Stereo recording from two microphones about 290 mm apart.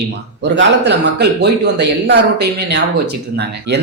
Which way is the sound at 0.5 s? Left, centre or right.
Right.